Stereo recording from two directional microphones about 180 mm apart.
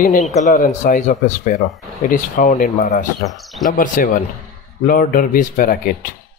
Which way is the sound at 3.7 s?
50° left (ahead or behind).